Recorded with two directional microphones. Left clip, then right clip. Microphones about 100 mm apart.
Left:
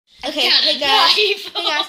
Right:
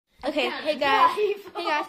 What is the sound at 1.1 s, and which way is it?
Speech, 10° left (ahead or behind).